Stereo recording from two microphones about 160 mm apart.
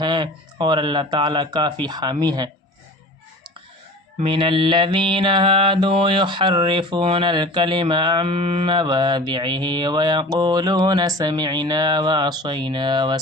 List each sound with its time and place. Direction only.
0.0 s speech: 30° right (ahead or behind)
1.8 s mantra: 25° right (ahead or behind)
4.2 s mantra: 30° right (ahead or behind)